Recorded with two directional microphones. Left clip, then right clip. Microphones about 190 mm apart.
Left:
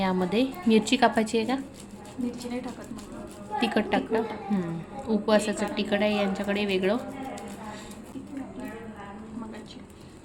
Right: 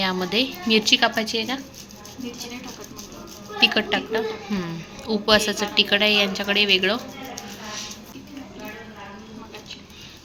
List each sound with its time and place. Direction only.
0.0 s a woman's voice: 15° left (ahead or behind)
3.6 s a woman's voice: 10° left (ahead or behind)